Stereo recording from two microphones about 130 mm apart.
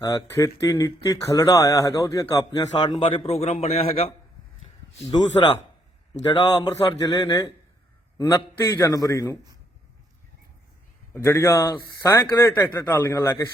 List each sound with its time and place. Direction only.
0.0 s speech: 25° left (ahead or behind); by 4.1 s 55° left (ahead or behind)
5.1 s a man's voice: 35° left (ahead or behind)
8.6 s speech: 25° left (ahead or behind)
11.1 s speech: 20° left (ahead or behind)